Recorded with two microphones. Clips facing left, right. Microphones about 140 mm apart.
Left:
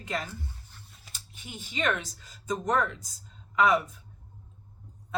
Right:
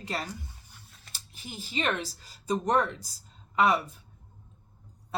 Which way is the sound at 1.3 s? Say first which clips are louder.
Right 2 dB; 35° right (ahead or behind).